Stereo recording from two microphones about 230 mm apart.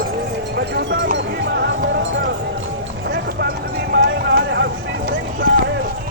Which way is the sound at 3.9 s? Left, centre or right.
Right.